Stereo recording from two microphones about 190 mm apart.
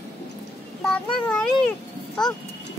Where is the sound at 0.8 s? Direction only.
5° left (ahead or behind).